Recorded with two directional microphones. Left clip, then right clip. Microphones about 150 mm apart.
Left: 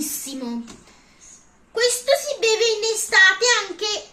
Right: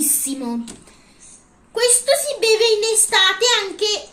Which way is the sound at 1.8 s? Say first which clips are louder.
Right 2 dB; 30° right (ahead or behind).